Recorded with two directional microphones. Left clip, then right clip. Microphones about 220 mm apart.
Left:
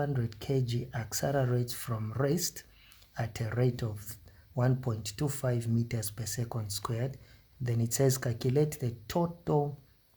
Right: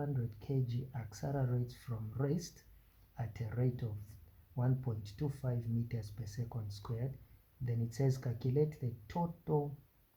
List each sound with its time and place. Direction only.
0.0 s speech: 35° left (ahead or behind)